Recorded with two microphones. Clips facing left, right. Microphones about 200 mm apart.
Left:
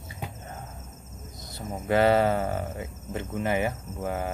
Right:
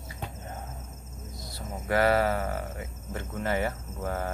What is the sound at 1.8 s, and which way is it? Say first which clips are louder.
Speech: left 3 dB; 25° left (ahead or behind).